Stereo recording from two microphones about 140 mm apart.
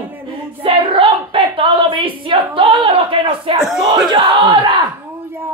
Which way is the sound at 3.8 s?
30° right (ahead or behind).